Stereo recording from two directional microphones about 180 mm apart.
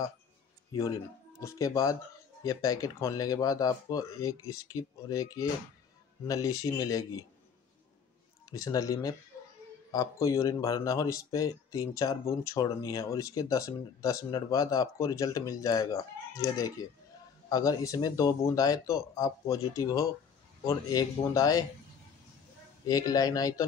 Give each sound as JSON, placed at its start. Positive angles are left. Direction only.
{"t": 0.7, "sound": "speech", "side_deg": 20}
{"t": 8.5, "sound": "speech", "side_deg": 20}
{"t": 22.8, "sound": "speech", "side_deg": 20}